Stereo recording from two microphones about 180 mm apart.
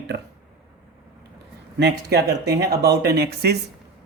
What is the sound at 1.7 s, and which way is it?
Speech, 65° right (ahead or behind).